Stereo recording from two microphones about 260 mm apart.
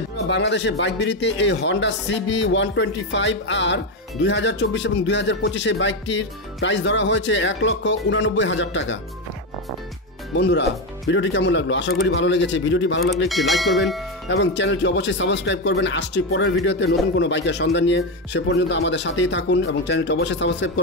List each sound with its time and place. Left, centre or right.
0.3 s a man's voice: left
10.3 s a man's voice: left
13.3 s speech: centre
14.3 s a man's voice: left